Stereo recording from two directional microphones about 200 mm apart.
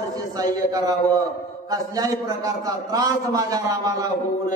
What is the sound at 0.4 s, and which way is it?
A man's voice, 20° right (ahead or behind).